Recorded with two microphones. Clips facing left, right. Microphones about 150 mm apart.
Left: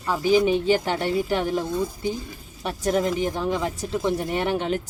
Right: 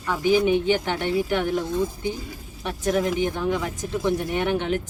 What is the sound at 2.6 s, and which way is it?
Speech, 35° left (ahead or behind).